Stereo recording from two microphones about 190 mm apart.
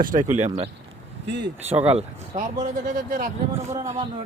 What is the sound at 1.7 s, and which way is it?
Speech, 35° right (ahead or behind).